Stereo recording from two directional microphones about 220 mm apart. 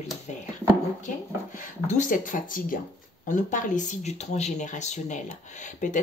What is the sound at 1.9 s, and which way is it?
Speech, 35° left (ahead or behind).